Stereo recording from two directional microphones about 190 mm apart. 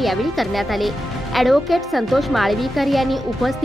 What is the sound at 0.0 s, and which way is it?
A woman's voice, centre (ahead or behind).